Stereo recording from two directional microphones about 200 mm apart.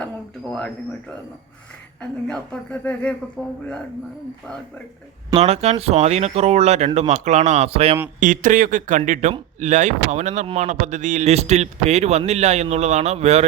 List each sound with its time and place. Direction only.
0.0 s a sound: 5° left (ahead or behind)
2.0 s speech: 5° left (ahead or behind)
5.3 s speech: 30° right (ahead or behind)
8.2 s speech: 40° right (ahead or behind)